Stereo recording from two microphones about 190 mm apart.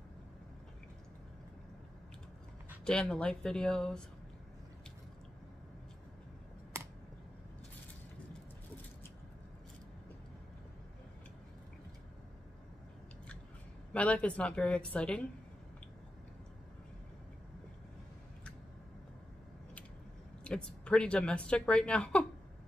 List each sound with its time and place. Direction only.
2.8 s a woman's voice: 5° left (ahead or behind)
6.7 s a sound: 15° right (ahead or behind)
13.9 s a woman's voice: 5° left (ahead or behind)
20.4 s a woman's voice: 5° left (ahead or behind)